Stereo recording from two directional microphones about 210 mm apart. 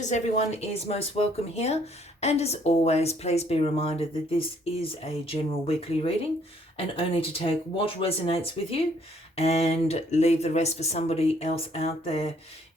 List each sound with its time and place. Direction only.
0.0 s speech: 35° left (ahead or behind)